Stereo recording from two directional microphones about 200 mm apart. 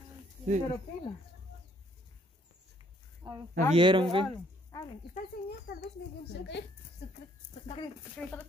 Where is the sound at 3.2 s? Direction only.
15° right (ahead or behind).